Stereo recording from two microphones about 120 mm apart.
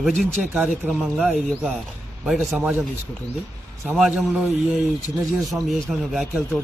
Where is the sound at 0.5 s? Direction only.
15° right (ahead or behind).